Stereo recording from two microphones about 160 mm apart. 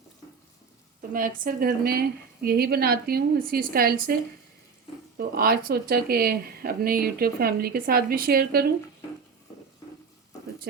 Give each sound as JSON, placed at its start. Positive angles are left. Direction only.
{"t": 1.5, "sound": "speech", "side_deg": -60}
{"t": 5.1, "sound": "speech", "side_deg": -70}